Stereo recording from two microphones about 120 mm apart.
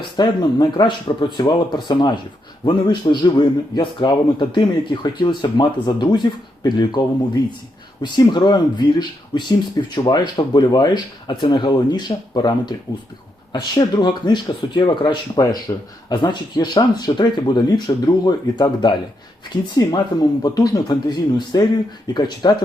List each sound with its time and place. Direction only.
0.2 s a man's voice: 40° left (ahead or behind)
8.0 s a man's voice: 40° left (ahead or behind)